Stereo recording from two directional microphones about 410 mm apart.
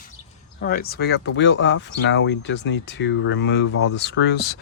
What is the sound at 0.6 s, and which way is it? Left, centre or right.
Speech, left.